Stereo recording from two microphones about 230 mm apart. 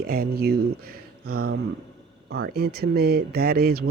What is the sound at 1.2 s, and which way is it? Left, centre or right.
Speech, right.